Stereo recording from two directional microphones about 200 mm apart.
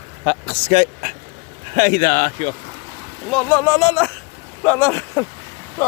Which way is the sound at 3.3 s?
5° left (ahead or behind).